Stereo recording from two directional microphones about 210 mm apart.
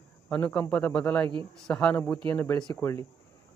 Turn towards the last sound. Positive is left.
turn(degrees=15)  # may be behind; listen again after turning